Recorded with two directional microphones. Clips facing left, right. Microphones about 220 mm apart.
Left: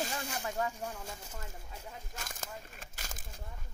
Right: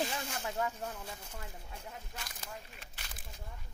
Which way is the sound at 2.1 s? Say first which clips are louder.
Left 2 dB; 45° left (ahead or behind).